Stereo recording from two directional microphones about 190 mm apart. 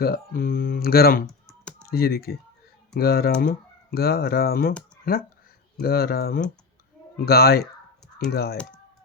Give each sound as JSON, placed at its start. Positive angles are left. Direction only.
{"t": 0.0, "sound": "speech", "side_deg": 50}
{"t": 1.3, "sound": "computer keyboard", "side_deg": 0}
{"t": 1.9, "sound": "speech", "side_deg": 55}